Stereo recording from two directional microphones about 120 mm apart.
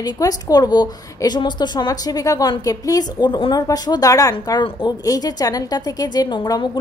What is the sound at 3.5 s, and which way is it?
A woman's voice, 30° left (ahead or behind).